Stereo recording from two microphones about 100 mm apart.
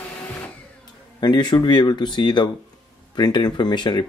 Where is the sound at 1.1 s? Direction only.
45° left (ahead or behind).